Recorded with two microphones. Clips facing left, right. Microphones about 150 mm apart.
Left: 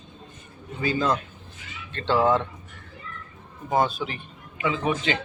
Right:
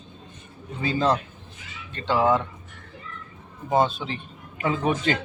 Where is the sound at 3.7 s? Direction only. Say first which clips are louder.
Right 1 dB; 25° right (ahead or behind).